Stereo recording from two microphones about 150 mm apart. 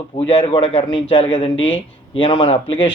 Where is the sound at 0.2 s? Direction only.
35° left (ahead or behind).